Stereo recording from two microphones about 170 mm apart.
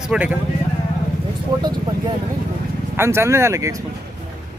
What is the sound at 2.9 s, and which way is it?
Speech, 15° right (ahead or behind).